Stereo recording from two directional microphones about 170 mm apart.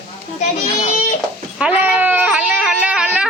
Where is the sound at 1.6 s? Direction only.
5° right (ahead or behind).